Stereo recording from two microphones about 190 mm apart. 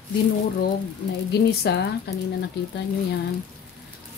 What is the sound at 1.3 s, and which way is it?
Speech, 60° left (ahead or behind).